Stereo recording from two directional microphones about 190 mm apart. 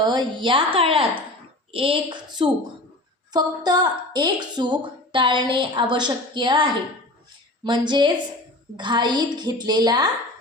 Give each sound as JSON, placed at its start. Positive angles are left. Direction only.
{"t": 0.0, "sound": "a woman's voice", "side_deg": -20}